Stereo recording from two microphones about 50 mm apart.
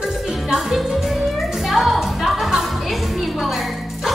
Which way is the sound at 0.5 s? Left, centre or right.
Centre.